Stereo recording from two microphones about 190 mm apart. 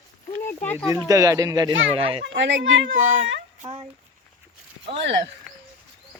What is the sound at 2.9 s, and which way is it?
Speech, 45° right (ahead or behind).